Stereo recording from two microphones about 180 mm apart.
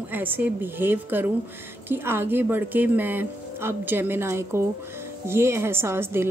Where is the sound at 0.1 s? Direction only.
10° right (ahead or behind).